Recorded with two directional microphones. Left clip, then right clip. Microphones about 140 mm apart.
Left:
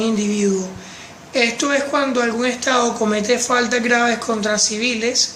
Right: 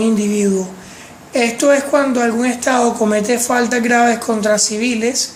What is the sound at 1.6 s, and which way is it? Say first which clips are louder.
Speech: right 5 dB; 50° right (ahead or behind).